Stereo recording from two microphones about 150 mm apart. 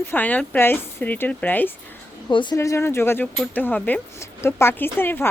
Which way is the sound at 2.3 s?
30° left (ahead or behind).